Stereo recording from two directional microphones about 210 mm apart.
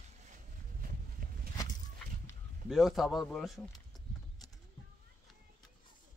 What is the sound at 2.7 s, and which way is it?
Speech, centre (ahead or behind).